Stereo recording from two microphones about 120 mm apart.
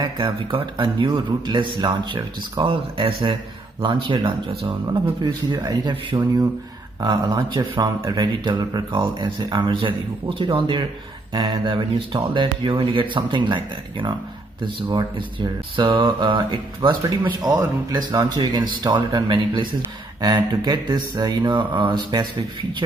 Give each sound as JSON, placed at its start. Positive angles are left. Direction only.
{"t": 0.0, "sound": "speech", "side_deg": -40}
{"t": 5.2, "sound": "speech", "side_deg": -35}